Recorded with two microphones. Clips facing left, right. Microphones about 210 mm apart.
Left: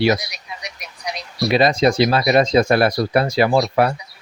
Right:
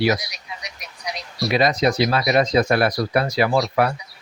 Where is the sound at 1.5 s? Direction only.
30° left (ahead or behind).